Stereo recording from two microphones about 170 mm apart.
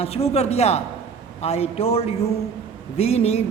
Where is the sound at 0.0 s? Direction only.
35° left (ahead or behind).